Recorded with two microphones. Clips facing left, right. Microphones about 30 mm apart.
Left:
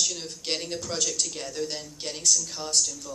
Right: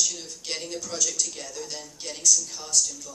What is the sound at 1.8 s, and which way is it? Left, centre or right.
Speech, left.